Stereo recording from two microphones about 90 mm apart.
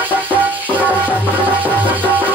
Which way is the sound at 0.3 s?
20° right (ahead or behind).